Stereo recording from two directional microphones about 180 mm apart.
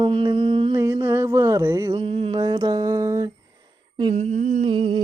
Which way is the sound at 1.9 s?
30° right (ahead or behind).